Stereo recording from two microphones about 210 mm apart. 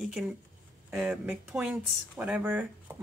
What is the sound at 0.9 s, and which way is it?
Speech, 5° right (ahead or behind).